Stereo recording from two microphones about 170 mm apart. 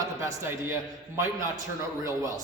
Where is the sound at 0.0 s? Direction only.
20° right (ahead or behind).